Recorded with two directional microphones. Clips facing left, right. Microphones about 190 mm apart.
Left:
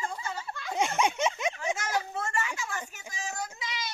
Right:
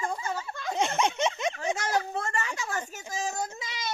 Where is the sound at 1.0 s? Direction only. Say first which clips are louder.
Right 1 dB; 5° left (ahead or behind).